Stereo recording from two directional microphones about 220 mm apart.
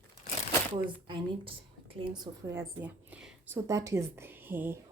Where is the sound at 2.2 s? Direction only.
10° right (ahead or behind).